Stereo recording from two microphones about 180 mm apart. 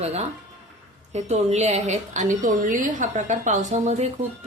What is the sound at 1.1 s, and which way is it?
A woman's voice, 35° right (ahead or behind).